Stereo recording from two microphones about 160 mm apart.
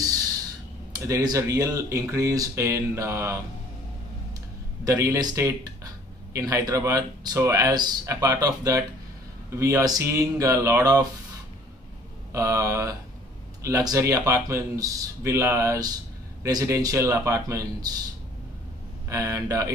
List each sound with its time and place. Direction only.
0.9 s speech: 20° right (ahead or behind)
4.8 s speech: 20° right (ahead or behind)
12.3 s speech: 20° right (ahead or behind)
19.0 s speech: 20° right (ahead or behind)